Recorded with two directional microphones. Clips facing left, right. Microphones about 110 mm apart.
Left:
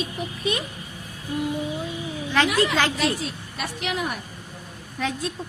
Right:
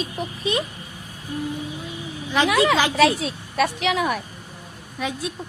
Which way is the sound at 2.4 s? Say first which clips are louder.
Right 5 dB; 90° right.